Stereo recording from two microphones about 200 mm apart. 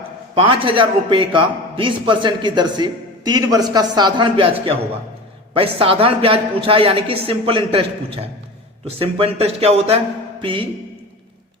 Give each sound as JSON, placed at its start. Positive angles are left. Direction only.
{"t": 0.3, "sound": "a man's voice", "side_deg": -25}